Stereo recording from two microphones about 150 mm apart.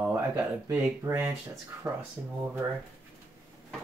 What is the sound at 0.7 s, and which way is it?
Speech, 15° right (ahead or behind).